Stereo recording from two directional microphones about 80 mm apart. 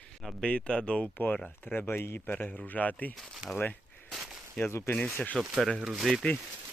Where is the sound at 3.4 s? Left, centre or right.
Centre.